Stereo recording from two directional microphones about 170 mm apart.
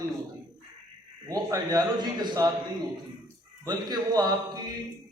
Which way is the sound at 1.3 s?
20° right (ahead or behind).